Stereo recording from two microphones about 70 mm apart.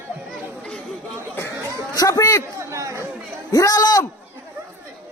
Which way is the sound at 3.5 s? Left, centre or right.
Left.